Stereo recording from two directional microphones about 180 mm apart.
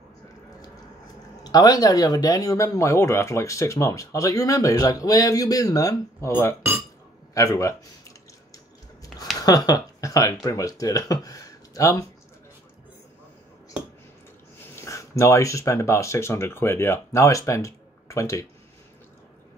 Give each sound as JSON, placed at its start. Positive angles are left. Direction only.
{"t": 1.4, "sound": "speech", "side_deg": 20}
{"t": 9.4, "sound": "speech", "side_deg": 20}
{"t": 14.8, "sound": "speech", "side_deg": 15}